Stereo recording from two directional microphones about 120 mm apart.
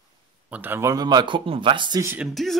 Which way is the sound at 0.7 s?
25° right (ahead or behind).